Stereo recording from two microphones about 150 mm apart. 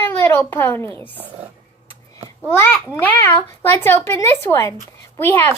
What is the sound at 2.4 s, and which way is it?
A child's voice, 10° left (ahead or behind).